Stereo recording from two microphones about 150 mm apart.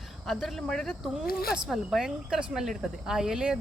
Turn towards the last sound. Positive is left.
turn(degrees=-5)  # may be behind; listen again after turning